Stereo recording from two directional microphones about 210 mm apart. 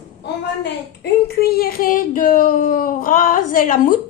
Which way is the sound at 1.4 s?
45° left (ahead or behind).